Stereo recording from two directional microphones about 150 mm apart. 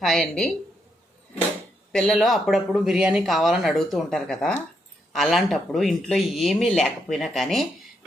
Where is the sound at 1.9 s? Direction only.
5° left (ahead or behind).